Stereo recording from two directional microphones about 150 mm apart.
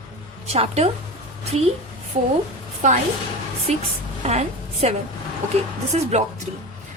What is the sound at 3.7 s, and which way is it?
A woman's voice, 45° right (ahead or behind).